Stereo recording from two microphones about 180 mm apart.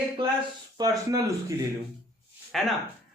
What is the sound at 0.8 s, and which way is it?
Speech, 20° right (ahead or behind).